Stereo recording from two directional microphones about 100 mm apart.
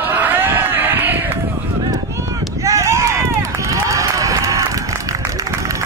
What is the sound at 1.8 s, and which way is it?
Run, 30° right (ahead or behind).